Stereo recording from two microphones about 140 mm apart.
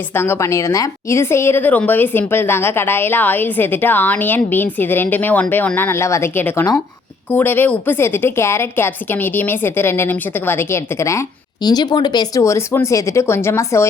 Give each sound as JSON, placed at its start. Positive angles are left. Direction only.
{"t": 0.1, "sound": "a woman's voice", "side_deg": 15}
{"t": 11.6, "sound": "speech", "side_deg": 30}